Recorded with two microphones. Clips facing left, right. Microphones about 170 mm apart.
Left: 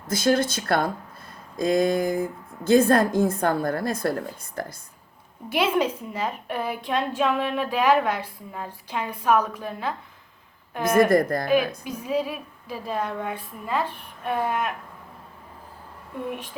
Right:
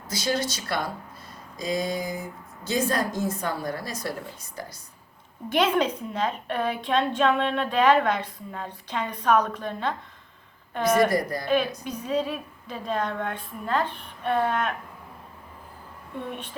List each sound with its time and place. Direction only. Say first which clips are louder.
0.1 s a woman's voice: left 6 dB; 50° left (ahead or behind)
5.5 s a woman's voice: even; 5° left (ahead or behind)
10.9 s a woman's voice: left 5 dB; 50° left (ahead or behind)
11.9 s a woman's voice: left 1 dB; 10° left (ahead or behind)